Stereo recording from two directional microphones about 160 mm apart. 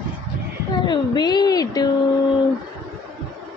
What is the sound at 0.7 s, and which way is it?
A woman's voice, 30° left (ahead or behind).